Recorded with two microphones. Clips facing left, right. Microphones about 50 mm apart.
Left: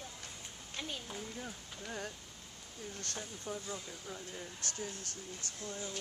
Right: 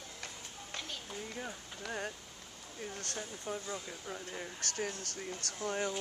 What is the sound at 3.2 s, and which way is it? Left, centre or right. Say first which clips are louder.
Speech: right 3 dB; centre.